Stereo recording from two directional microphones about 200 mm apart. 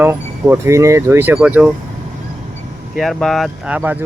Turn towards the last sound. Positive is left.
turn(degrees=-10)  # may be behind; listen again after turning